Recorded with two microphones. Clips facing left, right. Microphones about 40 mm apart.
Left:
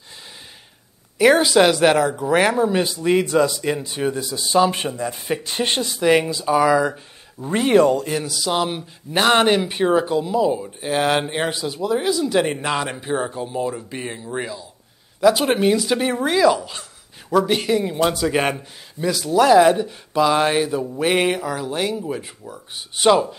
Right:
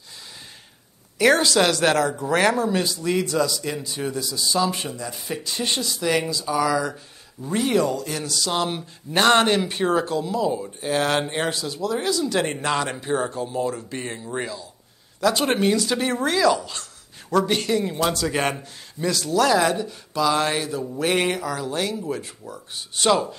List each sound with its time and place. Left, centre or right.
1.1 s speech: centre; by 8.1 s left
8.1 s speech: centre